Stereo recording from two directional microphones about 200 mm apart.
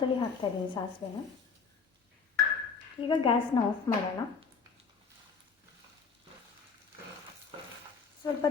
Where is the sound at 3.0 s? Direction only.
25° left (ahead or behind).